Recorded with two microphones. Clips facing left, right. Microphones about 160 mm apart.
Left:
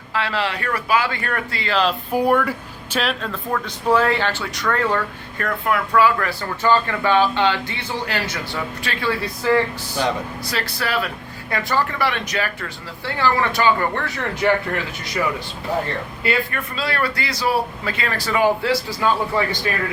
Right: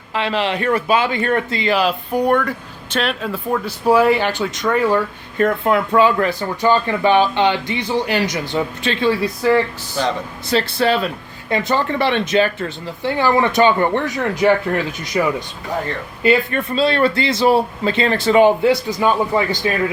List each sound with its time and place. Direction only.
0.1 s speech: 20° right (ahead or behind)
1.8 s speech: centre (ahead or behind)
3.3 s speech: 10° right (ahead or behind)
5.4 s speech: 25° right (ahead or behind)
10.5 s speech: 25° right (ahead or behind)
16.2 s speech: 20° right (ahead or behind)